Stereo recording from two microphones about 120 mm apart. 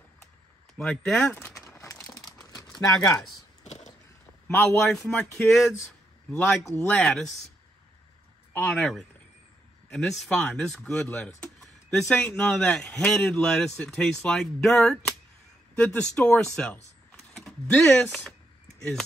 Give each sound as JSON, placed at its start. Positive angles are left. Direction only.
{"t": 0.7, "sound": "speech", "side_deg": 5}
{"t": 1.2, "sound": "speech", "side_deg": 15}
{"t": 1.8, "sound": "crumpling", "side_deg": 25}
{"t": 3.6, "sound": "a sound", "side_deg": 75}
{"t": 4.5, "sound": "a man's voice", "side_deg": 20}
{"t": 5.5, "sound": "speech", "side_deg": 0}
{"t": 6.6, "sound": "a man's voice", "side_deg": 20}
{"t": 7.0, "sound": "speech", "side_deg": 0}
{"t": 8.7, "sound": "speech", "side_deg": 5}
{"t": 11.0, "sound": "speech", "side_deg": 15}